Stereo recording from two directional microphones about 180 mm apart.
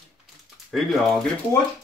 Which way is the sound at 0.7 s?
Centre (ahead or behind).